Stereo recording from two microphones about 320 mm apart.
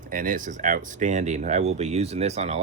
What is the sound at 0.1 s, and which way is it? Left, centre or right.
Speech, right.